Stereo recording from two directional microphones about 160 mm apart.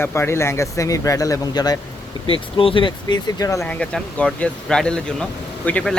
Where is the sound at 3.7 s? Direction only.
5° left (ahead or behind).